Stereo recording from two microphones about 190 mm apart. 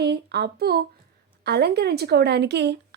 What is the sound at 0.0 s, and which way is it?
A woman's voice, 60° right (ahead or behind).